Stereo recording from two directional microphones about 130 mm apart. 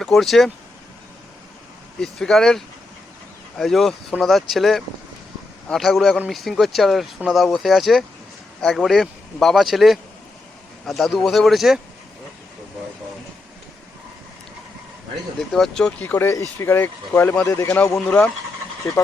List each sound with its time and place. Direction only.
0.0 s speech: centre (ahead or behind)
2.0 s speech: 5° left (ahead or behind)
15.4 s speech: 5° left (ahead or behind); by 17.9 s 25° left (ahead or behind)
17.9 s speech: 5° left (ahead or behind)